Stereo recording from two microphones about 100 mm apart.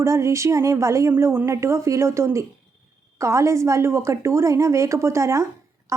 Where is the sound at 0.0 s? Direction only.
30° right (ahead or behind).